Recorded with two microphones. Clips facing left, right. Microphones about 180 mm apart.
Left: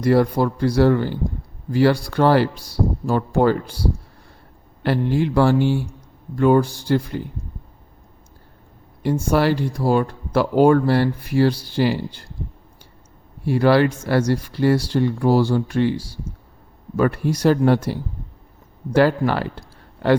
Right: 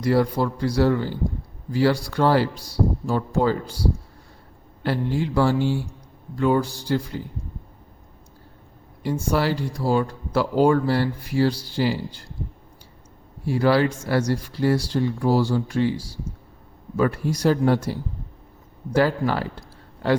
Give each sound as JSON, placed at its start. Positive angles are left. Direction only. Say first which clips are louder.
{"t": 0.0, "sound": "speech", "louder": "left 4 dB", "side_deg": 55}
{"t": 4.8, "sound": "speech", "louder": "left 4 dB", "side_deg": 65}
{"t": 6.3, "sound": "speech", "louder": "left 5 dB", "side_deg": 50}
{"t": 9.0, "sound": "speech", "louder": "left 4 dB", "side_deg": 60}
{"t": 13.4, "sound": "speech", "louder": "left 3 dB", "side_deg": 65}